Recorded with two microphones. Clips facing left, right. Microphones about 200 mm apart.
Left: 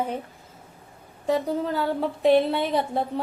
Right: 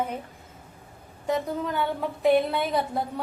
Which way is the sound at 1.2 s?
30° left (ahead or behind).